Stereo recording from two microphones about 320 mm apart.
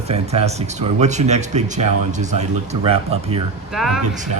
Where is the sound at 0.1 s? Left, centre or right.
Centre.